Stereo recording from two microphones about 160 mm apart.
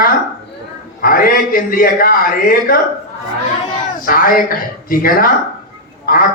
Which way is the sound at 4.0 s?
65° left (ahead or behind).